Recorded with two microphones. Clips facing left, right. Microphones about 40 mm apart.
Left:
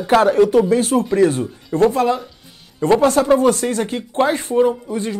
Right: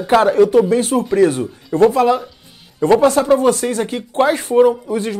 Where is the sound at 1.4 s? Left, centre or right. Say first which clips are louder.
Right 3 dB; centre.